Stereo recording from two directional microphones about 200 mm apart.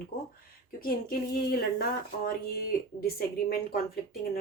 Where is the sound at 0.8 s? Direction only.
45° left (ahead or behind).